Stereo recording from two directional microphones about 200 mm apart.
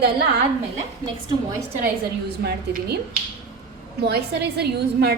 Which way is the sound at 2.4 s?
55° right (ahead or behind).